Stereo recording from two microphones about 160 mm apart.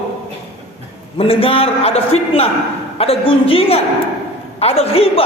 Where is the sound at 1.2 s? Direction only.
35° left (ahead or behind).